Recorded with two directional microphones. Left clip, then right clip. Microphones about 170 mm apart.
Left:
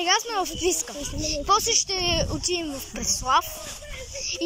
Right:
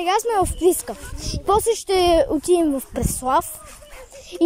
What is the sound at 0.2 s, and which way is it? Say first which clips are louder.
A child's voice: right 7 dB; 40° right (ahead or behind).